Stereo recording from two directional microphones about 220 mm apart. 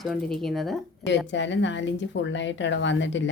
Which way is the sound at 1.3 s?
55° left (ahead or behind).